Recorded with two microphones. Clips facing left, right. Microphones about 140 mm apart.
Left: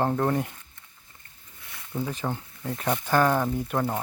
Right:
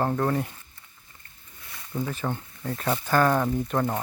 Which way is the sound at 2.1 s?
15° left (ahead or behind).